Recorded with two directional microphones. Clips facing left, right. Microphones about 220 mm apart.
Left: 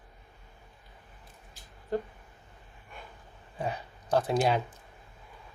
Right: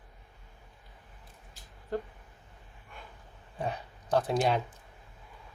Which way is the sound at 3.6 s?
5° left (ahead or behind).